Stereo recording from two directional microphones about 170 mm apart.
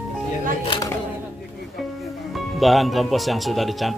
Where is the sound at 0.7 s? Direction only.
20° left (ahead or behind).